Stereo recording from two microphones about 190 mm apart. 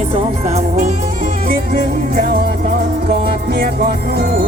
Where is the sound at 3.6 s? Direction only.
50° right (ahead or behind).